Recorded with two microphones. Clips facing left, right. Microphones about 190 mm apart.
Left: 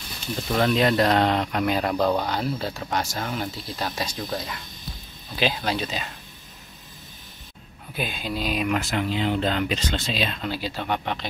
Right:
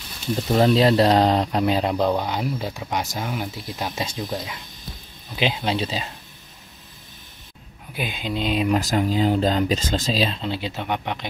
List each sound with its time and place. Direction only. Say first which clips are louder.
0.6 s speech: right 4 dB; 30° right (ahead or behind)
5.4 s speech: right 2 dB; 20° right (ahead or behind)
7.9 s speech: right 2 dB; 15° right (ahead or behind)